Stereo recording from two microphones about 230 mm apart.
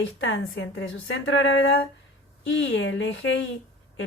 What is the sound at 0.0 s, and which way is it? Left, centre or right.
A woman's voice, left.